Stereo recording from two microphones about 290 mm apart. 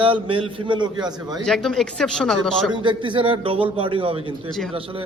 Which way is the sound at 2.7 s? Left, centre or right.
Centre.